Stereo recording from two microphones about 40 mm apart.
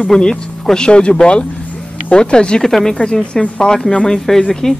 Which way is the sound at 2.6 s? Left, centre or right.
Centre.